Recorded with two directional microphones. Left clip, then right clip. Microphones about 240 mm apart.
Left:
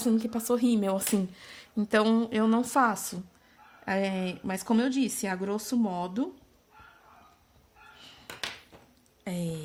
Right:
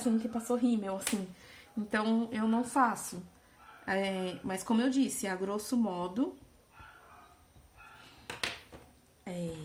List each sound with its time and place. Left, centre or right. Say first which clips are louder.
0.0 s speech: left 4 dB; left
9.2 s speech: left 4 dB; left